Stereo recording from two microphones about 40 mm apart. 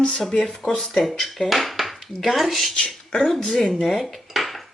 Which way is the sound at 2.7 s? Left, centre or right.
Left.